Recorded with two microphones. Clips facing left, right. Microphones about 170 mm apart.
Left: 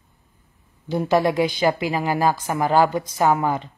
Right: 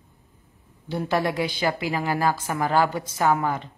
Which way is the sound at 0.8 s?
15° left (ahead or behind).